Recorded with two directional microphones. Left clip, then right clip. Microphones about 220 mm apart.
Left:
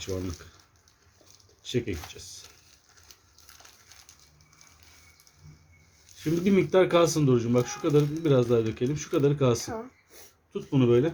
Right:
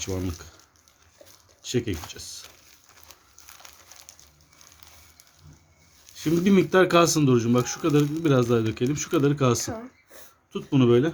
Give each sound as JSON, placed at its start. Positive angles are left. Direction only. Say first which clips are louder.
{"t": 0.0, "sound": "speech", "louder": "right 3 dB", "side_deg": -15}
{"t": 1.6, "sound": "speech", "louder": "right 3 dB", "side_deg": -20}
{"t": 6.2, "sound": "speech", "louder": "right 3 dB", "side_deg": -20}